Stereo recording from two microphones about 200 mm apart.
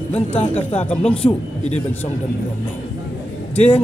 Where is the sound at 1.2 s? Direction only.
35° left (ahead or behind).